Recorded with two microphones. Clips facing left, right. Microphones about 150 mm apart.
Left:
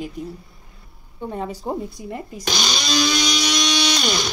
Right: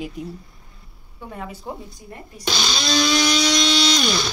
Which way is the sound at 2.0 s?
90° left.